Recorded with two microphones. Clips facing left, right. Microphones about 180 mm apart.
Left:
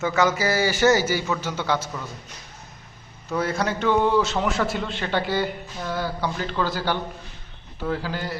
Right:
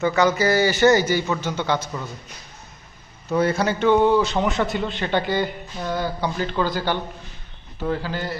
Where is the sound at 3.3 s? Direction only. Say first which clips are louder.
Right 4 dB; centre (ahead or behind).